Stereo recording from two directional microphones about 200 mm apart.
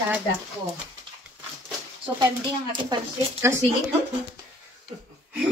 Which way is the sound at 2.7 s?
15° right (ahead or behind).